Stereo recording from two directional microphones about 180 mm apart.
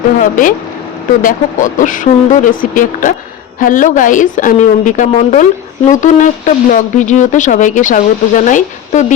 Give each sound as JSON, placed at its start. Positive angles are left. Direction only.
{"t": 0.2, "sound": "speech", "side_deg": 50}